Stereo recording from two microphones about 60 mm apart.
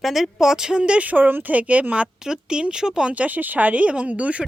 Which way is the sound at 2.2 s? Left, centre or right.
Centre.